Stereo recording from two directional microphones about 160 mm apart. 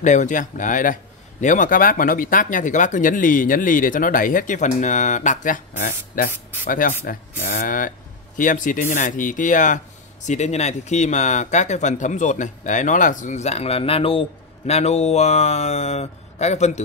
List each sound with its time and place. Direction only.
0.0 s speech: 50° left (ahead or behind)